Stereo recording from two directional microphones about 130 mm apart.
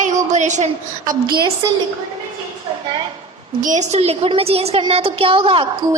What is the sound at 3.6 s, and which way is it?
A woman's voice, 70° right (ahead or behind).